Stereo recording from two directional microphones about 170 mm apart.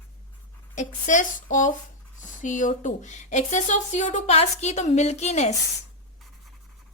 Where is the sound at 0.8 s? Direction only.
45° left (ahead or behind).